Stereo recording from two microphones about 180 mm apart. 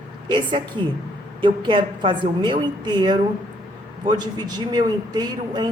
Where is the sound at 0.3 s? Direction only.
25° right (ahead or behind).